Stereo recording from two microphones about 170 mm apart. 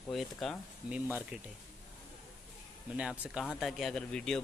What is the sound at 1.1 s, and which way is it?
Speech, 10° right (ahead or behind).